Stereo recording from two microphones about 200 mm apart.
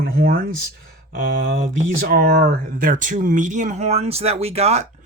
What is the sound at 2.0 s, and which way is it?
Speech, 45° right (ahead or behind).